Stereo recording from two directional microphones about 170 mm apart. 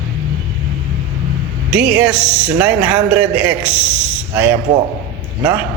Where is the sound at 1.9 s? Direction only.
5° right (ahead or behind).